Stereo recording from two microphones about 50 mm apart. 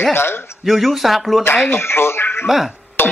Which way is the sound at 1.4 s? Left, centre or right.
Left.